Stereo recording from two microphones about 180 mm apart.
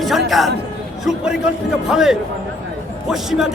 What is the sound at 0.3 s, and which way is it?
A man's voice, centre (ahead or behind).